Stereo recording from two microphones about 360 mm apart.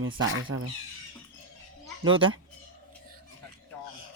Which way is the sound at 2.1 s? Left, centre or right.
Centre.